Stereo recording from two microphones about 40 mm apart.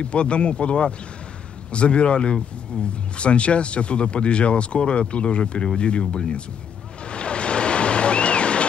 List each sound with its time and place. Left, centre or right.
0.0 s speech: left
7.1 s waves: left